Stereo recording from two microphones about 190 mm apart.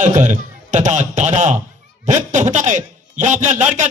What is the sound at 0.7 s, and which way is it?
Speech, 40° right (ahead or behind).